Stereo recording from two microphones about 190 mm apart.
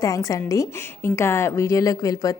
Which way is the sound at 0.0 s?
20° left (ahead or behind).